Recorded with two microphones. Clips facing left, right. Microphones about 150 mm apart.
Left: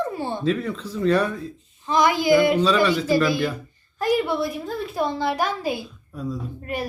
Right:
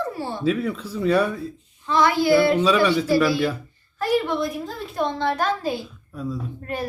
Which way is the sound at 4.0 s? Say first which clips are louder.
Even; 10° left (ahead or behind).